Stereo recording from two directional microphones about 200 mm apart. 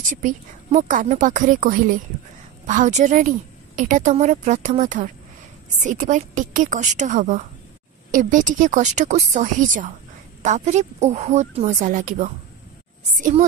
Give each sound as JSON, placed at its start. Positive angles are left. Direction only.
{"t": 0.2, "sound": "a woman's voice", "side_deg": -40}